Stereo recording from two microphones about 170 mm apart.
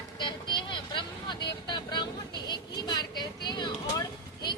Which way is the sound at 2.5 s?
25° left (ahead or behind).